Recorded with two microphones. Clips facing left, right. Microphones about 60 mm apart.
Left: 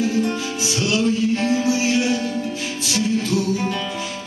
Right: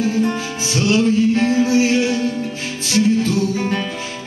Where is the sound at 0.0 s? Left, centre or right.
Right.